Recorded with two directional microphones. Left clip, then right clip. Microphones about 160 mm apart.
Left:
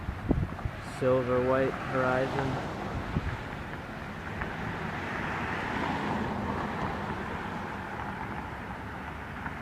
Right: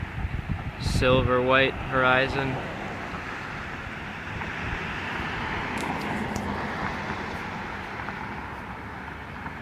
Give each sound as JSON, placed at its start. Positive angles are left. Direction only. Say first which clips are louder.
{"t": 1.0, "sound": "speech", "louder": "right 4 dB", "side_deg": -15}